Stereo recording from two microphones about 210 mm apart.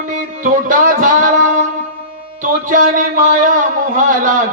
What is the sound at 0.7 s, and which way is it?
Music, 40° right (ahead or behind).